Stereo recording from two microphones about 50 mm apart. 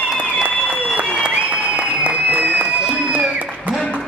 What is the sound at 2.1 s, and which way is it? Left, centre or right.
Applause, right.